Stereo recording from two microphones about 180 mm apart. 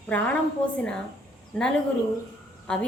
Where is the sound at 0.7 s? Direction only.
5° left (ahead or behind).